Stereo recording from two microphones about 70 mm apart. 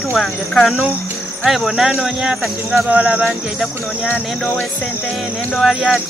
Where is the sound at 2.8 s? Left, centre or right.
Centre.